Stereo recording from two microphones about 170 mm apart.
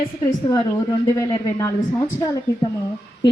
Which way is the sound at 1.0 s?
20° left (ahead or behind).